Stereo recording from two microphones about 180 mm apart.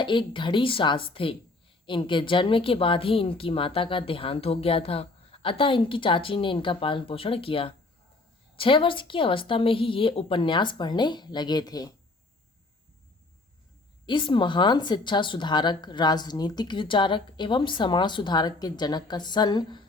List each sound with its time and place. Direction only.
0.0 s speech: 25° left (ahead or behind)
14.1 s speech: 25° left (ahead or behind)